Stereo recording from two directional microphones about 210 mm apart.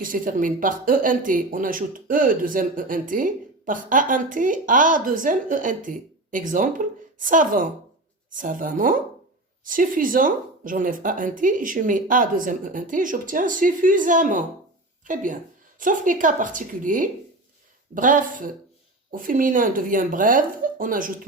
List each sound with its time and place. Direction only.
0.0 s speech: 40° right (ahead or behind)